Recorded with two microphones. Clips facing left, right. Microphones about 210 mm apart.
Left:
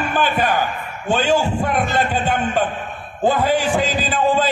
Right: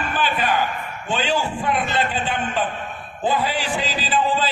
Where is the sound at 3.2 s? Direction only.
45° left (ahead or behind).